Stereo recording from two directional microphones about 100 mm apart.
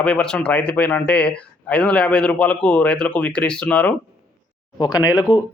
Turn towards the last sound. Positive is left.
turn(degrees=40)  # may be behind; listen again after turning